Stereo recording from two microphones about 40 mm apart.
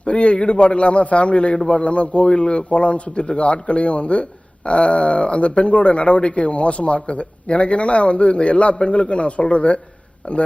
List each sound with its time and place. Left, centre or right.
0.0 s a man's voice: left